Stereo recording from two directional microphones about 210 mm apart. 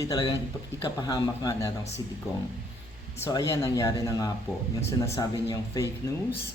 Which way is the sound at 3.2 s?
15° left (ahead or behind).